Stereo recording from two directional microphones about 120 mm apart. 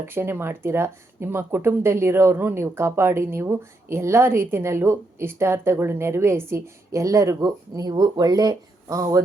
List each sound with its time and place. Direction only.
0.1 s speech: 20° right (ahead or behind)